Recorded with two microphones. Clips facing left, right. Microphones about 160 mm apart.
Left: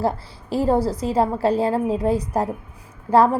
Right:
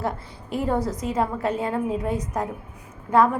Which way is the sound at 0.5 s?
30° left (ahead or behind).